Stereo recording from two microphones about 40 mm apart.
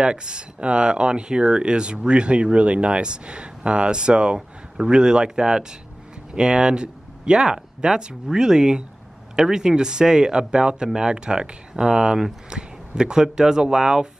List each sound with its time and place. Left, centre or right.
0.0 s speech: right